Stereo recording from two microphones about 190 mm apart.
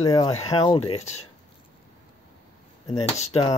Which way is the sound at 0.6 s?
30° left (ahead or behind).